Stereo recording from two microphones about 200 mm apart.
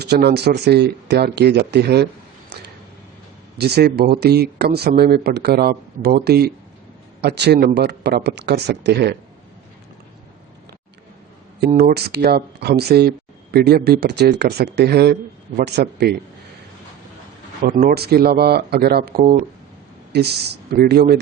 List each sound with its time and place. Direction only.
0.0 s speech: 55° right (ahead or behind)
3.6 s speech: 55° right (ahead or behind)
11.8 s speech: 50° right (ahead or behind)
17.6 s speech: 45° right (ahead or behind)